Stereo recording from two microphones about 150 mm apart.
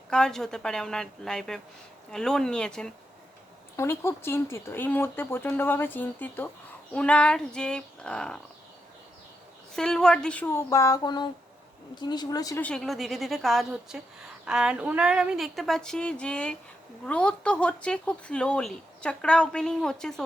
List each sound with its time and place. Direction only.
0.1 s a woman's voice: 5° left (ahead or behind)
3.8 s a woman's voice: 15° left (ahead or behind)
9.7 s speech: 5° left (ahead or behind); by 12.6 s 25° left (ahead or behind)
12.6 s a woman's voice: 5° left (ahead or behind)